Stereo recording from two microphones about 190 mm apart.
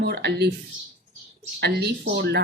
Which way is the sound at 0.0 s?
60° right (ahead or behind).